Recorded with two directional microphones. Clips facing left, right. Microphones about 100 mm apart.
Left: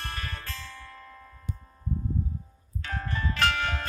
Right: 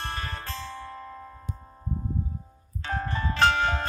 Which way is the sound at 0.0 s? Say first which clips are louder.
Right 4 dB; 30° right (ahead or behind).